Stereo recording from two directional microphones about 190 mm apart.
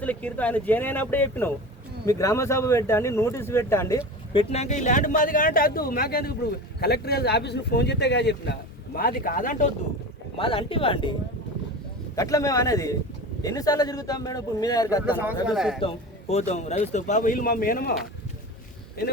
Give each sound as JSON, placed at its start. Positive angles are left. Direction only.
{"t": 0.0, "sound": "speech", "side_deg": 10}
{"t": 4.3, "sound": "speech", "side_deg": 30}
{"t": 9.0, "sound": "speech", "side_deg": 50}
{"t": 10.3, "sound": "a man's voice", "side_deg": 30}
{"t": 12.1, "sound": "a man's voice", "side_deg": 15}
{"t": 15.0, "sound": "a man's voice", "side_deg": -10}
{"t": 16.3, "sound": "speech", "side_deg": 35}